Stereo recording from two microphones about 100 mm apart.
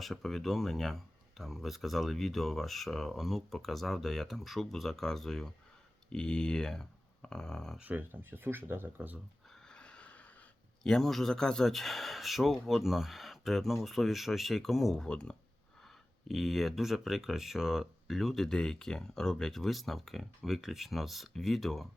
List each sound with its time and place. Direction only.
0.0 s speech: centre (ahead or behind)
7.8 s speech: 15° right (ahead or behind)
9.6 s a sound: 10° left (ahead or behind)
10.8 s speech: 5° left (ahead or behind)